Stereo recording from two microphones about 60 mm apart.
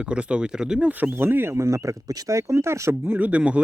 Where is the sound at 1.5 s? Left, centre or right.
Right.